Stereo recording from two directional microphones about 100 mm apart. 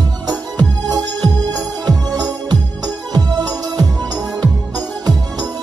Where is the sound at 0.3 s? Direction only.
45° right (ahead or behind).